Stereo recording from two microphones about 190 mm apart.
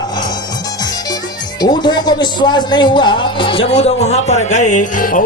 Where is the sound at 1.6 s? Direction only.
20° left (ahead or behind).